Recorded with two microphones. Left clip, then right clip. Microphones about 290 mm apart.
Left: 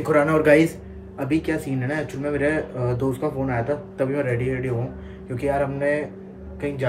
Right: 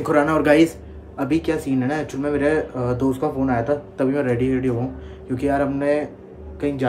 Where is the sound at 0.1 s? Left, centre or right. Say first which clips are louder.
Even; centre.